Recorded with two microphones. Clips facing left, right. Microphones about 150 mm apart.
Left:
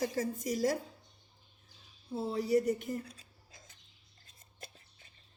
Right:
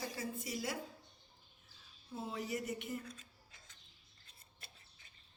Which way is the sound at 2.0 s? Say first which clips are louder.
Left 9 dB; 35° left (ahead or behind).